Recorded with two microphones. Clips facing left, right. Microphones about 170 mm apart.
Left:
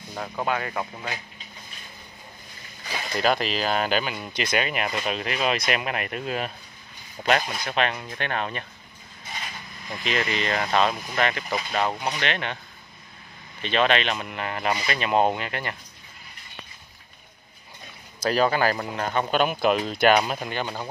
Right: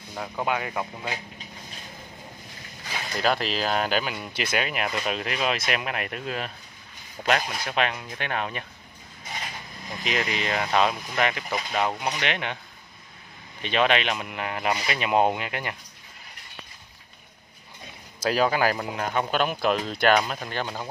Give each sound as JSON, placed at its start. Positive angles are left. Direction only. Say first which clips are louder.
{"t": 0.1, "sound": "speech", "louder": "even", "side_deg": 0}
{"t": 0.5, "sound": "speech", "louder": "even", "side_deg": -10}
{"t": 3.2, "sound": "speech", "louder": "left 1 dB", "side_deg": 0}
{"t": 10.0, "sound": "speech", "louder": "left 1 dB", "side_deg": -10}
{"t": 13.6, "sound": "speech", "louder": "left 1 dB", "side_deg": -10}
{"t": 18.2, "sound": "speech", "louder": "left 1 dB", "side_deg": -10}